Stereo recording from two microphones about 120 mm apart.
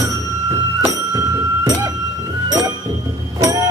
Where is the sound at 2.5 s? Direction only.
35° right (ahead or behind).